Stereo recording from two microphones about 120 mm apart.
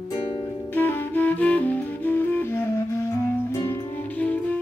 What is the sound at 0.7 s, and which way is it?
Music, 15° left (ahead or behind).